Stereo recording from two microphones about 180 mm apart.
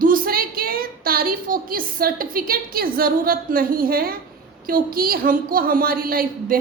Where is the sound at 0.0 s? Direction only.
50° right (ahead or behind).